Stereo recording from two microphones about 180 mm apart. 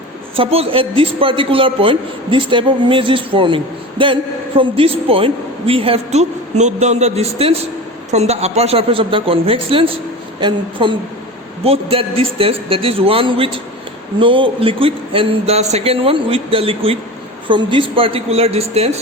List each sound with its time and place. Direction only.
0.3 s a man's voice: 30° right (ahead or behind)